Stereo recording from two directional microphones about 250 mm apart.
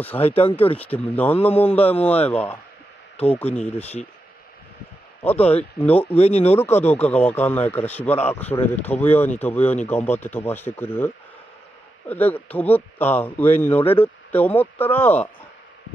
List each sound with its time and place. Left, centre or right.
0.4 s speech: left
0.7 s speech: centre
5.4 s speech: left
5.8 s speech: centre
6.1 s speech: left
6.5 s speech: centre
12.1 s speech: centre